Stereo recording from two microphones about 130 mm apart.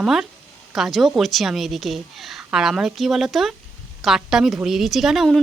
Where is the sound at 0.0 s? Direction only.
5° right (ahead or behind).